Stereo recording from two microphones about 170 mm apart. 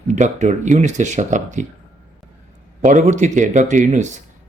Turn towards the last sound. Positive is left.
turn(degrees=-45)  # may be behind; listen again after turning